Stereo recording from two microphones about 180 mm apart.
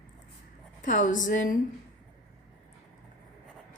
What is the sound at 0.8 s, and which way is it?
Speech, 45° left (ahead or behind).